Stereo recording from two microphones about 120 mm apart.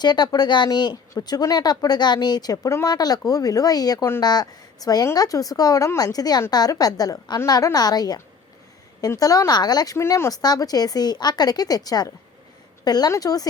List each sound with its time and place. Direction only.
0.0 s speech: 35° left (ahead or behind)